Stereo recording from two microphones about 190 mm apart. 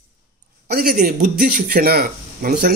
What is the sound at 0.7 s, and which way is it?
A man's voice, 50° right (ahead or behind).